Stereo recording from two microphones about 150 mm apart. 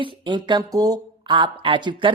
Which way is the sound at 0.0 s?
35° right (ahead or behind).